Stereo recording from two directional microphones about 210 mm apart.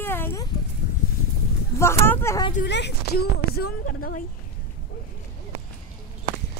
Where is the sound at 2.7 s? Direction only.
55° left (ahead or behind).